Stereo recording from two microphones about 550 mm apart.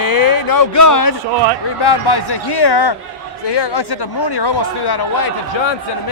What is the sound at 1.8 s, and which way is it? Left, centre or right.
Speech, left.